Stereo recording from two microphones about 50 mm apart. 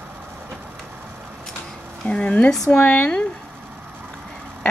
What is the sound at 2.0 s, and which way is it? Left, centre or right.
Speech, centre.